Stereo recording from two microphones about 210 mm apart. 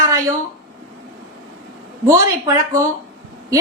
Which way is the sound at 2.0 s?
15° right (ahead or behind).